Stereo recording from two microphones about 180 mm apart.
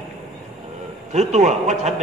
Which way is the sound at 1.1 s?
40° right (ahead or behind).